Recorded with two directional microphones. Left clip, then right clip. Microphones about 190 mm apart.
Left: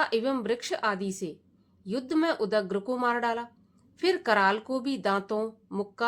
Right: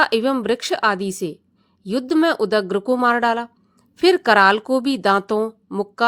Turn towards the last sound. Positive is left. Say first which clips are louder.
# right 9 dB
turn(degrees=-40)  # may be behind; listen again after turning